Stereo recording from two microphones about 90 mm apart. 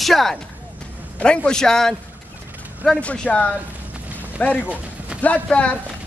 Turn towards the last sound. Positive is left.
turn(degrees=15)  # may be behind; listen again after turning